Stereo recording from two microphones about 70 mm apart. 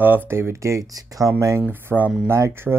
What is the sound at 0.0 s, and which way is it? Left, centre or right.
Speech, right.